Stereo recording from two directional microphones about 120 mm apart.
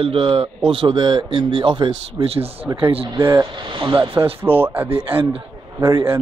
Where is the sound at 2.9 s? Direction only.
50° right (ahead or behind).